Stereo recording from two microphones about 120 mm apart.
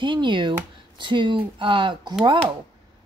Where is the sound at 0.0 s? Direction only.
40° right (ahead or behind).